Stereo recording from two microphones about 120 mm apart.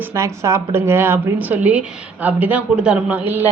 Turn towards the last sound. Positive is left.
turn(degrees=-15)  # may be behind; listen again after turning